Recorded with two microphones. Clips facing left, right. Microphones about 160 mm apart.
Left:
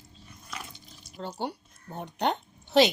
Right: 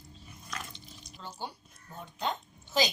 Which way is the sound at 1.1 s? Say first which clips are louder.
Left 8 dB; 65° left (ahead or behind).